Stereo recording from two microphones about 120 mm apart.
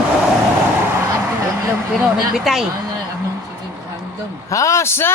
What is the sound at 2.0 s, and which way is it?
Speech, centre (ahead or behind).